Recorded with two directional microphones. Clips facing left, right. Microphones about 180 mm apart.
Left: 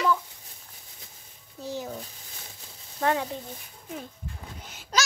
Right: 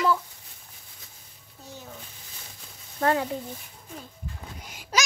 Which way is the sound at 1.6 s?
80° left.